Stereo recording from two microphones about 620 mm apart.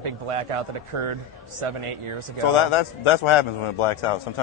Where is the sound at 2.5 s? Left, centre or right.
Left.